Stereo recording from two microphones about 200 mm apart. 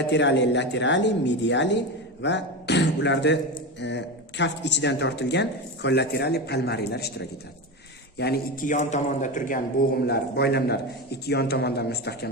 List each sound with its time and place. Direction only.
0.1 s a man's voice: 60° left (ahead or behind); by 9.6 s 40° left (ahead or behind)
10.1 s a man's voice: 50° left (ahead or behind)